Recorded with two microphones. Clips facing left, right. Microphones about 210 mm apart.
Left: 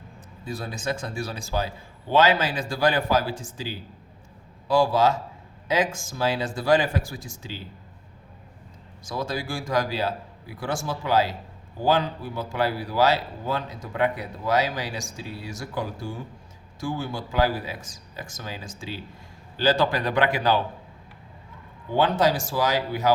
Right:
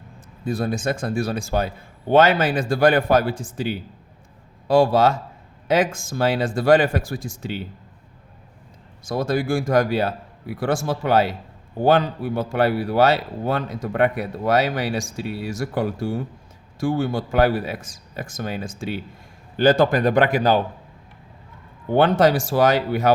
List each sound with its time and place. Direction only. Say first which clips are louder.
0.4 s a man's voice: right 7 dB; 50° right (ahead or behind)
9.0 s a man's voice: right 8 dB; 55° right (ahead or behind)
16.8 s a man's voice: right 8 dB; 60° right (ahead or behind)
21.9 s a man's voice: right 5 dB; 60° right (ahead or behind)